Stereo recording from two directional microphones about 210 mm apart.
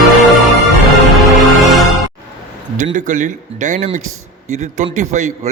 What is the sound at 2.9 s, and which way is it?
Speech, 35° right (ahead or behind).